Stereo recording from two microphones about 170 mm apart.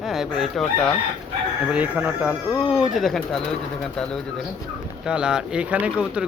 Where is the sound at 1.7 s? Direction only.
10° right (ahead or behind).